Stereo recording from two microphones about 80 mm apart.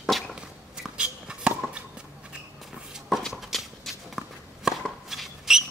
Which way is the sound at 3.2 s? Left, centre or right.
Centre.